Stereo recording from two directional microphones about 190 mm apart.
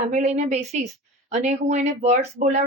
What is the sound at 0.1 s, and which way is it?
A woman's voice, 35° right (ahead or behind).